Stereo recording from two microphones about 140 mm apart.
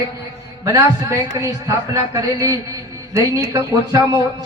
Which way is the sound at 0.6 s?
20° right (ahead or behind).